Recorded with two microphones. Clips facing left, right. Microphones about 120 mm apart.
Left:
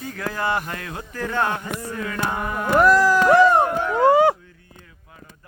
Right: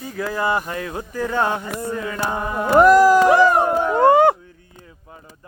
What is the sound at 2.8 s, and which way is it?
Speech, 20° right (ahead or behind).